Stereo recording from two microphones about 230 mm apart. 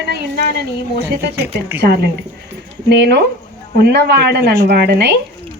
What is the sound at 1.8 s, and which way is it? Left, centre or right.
Speech, right.